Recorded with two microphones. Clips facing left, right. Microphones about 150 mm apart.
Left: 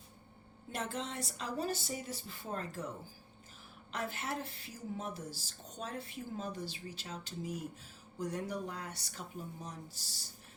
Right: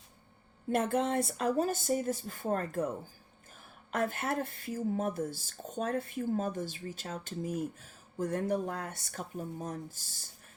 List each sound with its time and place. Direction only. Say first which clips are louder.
0.7 s speech: right 11 dB; 55° right (ahead or behind)
3.9 s speech: right 7 dB; 50° right (ahead or behind)